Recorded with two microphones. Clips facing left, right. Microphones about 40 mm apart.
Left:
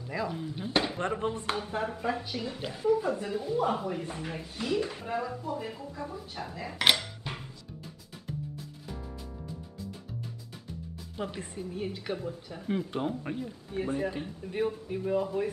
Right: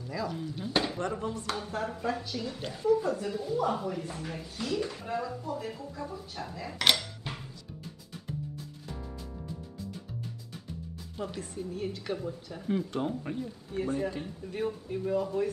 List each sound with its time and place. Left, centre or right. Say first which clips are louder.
0.1 s a woman's voice: left 1 dB; left
0.9 s speech: left 2 dB; left; by 7.3 s centre
8.3 s music: even; centre
11.3 s a woman's voice: even; left